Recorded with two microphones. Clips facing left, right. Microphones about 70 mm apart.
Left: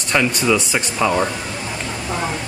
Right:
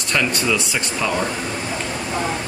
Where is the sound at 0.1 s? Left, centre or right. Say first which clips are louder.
Left 3 dB; centre.